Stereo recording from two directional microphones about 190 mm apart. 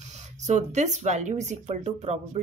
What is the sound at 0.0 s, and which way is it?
Speech, 35° right (ahead or behind).